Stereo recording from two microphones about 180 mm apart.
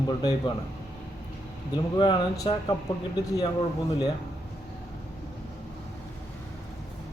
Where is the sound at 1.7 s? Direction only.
25° left (ahead or behind).